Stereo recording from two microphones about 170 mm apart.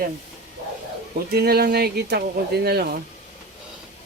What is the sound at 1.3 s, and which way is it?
Speech, 65° right (ahead or behind).